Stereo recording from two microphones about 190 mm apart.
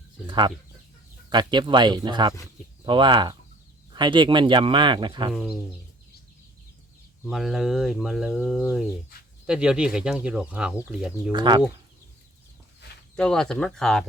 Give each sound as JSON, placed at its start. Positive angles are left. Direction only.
{"t": 0.3, "sound": "speech", "side_deg": -25}
{"t": 5.3, "sound": "speech", "side_deg": -5}
{"t": 7.3, "sound": "speech", "side_deg": 0}
{"t": 11.3, "sound": "speech", "side_deg": -25}
{"t": 13.1, "sound": "speech", "side_deg": 5}